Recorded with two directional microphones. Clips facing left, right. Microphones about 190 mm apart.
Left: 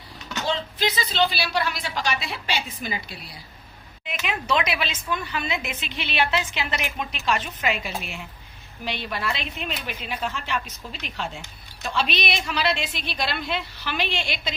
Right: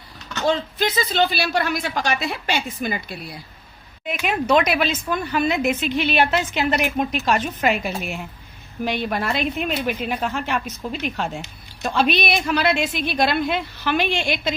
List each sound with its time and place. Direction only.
0.4 s speech: 50° right (ahead or behind)